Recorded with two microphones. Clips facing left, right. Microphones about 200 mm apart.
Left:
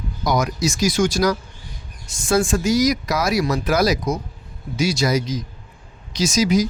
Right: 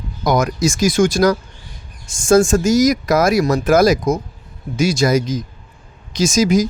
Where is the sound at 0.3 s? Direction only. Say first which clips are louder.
Right 4 dB; 50° right (ahead or behind).